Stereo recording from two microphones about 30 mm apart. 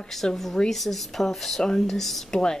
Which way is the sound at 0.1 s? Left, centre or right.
Centre.